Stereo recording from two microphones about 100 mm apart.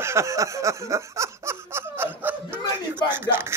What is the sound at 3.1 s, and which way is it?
Speech, 20° right (ahead or behind).